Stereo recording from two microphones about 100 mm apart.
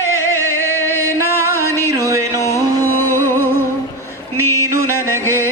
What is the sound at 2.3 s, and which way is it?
Music, 30° left (ahead or behind).